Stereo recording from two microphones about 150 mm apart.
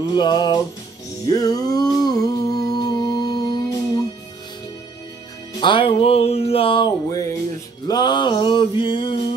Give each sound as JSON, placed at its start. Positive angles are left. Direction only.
{"t": 0.0, "sound": "music", "side_deg": 30}
{"t": 1.3, "sound": "humming", "side_deg": 25}
{"t": 5.5, "sound": "music", "side_deg": 30}